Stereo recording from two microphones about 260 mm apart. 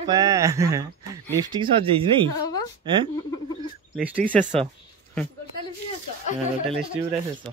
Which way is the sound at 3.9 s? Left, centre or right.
Centre.